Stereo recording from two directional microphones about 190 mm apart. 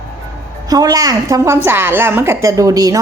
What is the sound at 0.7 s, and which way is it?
A woman's voice, 20° right (ahead or behind).